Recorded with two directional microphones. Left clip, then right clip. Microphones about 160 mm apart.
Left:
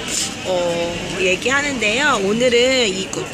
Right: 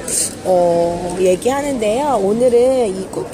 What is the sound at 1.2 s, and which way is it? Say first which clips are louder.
Speech: right 2 dB; 50° right (ahead or behind).